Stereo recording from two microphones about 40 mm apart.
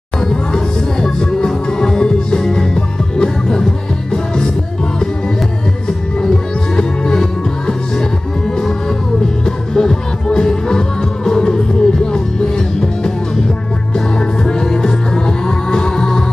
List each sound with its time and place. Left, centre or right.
0.2 s music: centre
6.2 s music: centre